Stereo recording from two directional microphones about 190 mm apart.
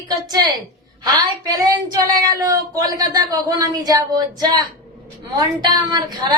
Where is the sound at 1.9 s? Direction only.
20° right (ahead or behind).